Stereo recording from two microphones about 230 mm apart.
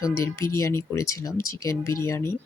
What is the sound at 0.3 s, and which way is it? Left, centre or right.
Speech, centre.